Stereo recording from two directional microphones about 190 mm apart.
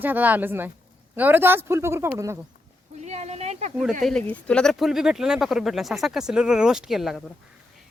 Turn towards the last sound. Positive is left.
turn(degrees=0)  # may be behind; listen again after turning